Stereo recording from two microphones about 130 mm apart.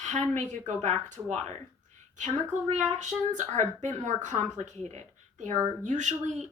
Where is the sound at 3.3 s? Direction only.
65° right (ahead or behind).